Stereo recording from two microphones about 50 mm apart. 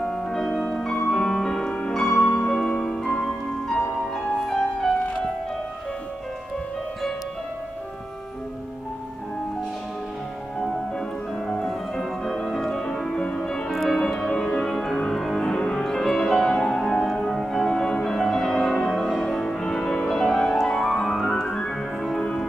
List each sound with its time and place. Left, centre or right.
0.0 s music: centre
11.4 s music: centre